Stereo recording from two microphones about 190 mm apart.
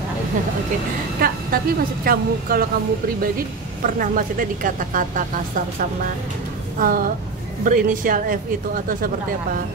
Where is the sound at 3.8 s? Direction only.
45° right (ahead or behind).